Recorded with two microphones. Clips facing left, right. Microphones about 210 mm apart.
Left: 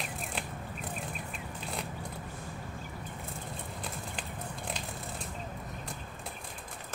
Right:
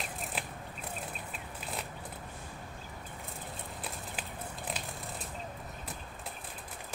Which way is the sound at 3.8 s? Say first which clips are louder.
Left 2 dB; 5° right (ahead or behind).